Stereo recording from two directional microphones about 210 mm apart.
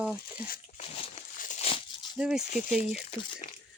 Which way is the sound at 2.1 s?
5° right (ahead or behind).